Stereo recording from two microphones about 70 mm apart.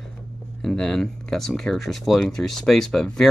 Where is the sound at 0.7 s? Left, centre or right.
Centre.